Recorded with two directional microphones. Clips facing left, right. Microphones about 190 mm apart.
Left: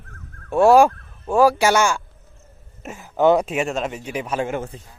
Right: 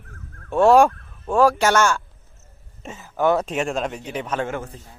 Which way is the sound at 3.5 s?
5° left (ahead or behind).